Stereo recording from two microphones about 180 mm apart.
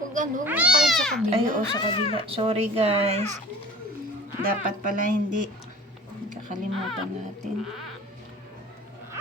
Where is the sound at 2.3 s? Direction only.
30° right (ahead or behind).